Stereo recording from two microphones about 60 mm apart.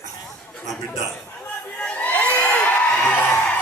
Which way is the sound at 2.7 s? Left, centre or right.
Left.